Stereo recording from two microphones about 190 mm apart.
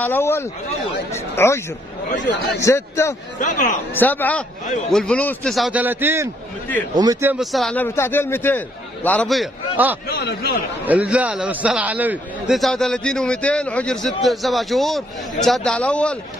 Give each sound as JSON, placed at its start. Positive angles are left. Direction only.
{"t": 0.0, "sound": "a man's voice", "side_deg": 10}
{"t": 3.3, "sound": "a man's voice", "side_deg": 40}
{"t": 3.9, "sound": "a man's voice", "side_deg": 10}
{"t": 7.3, "sound": "a man's voice", "side_deg": 0}
{"t": 10.0, "sound": "a man's voice", "side_deg": 55}
{"t": 10.9, "sound": "a man's voice", "side_deg": -5}